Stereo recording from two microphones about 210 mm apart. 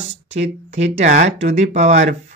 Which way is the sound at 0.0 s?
30° right (ahead or behind).